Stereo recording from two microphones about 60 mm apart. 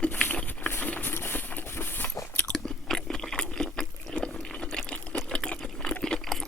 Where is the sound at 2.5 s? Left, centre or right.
Centre.